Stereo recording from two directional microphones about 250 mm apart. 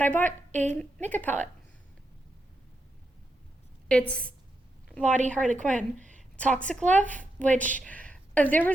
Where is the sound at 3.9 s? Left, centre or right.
Centre.